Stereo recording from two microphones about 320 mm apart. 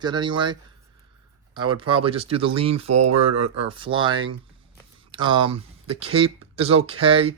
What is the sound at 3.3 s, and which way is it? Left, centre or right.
Speech, right.